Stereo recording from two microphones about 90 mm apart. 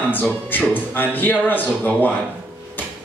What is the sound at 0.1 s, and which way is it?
A man's voice, 20° left (ahead or behind).